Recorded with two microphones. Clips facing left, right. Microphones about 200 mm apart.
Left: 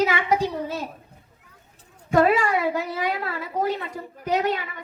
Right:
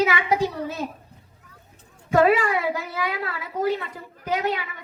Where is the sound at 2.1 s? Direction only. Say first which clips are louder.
Even; 45° left (ahead or behind).